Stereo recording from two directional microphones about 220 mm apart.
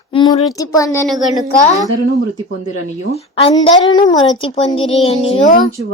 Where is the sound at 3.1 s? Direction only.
25° left (ahead or behind).